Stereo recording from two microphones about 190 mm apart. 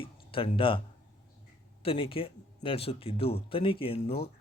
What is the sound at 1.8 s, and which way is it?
Speech, 30° left (ahead or behind).